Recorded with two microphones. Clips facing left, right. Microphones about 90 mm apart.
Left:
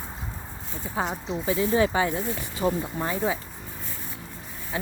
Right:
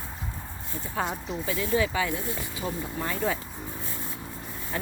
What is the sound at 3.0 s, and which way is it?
Speech, 20° left (ahead or behind).